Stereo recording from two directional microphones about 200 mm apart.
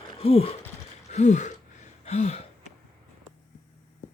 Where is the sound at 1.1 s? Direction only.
35° left (ahead or behind).